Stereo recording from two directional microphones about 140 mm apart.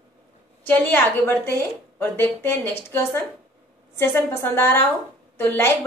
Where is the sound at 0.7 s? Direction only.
15° left (ahead or behind).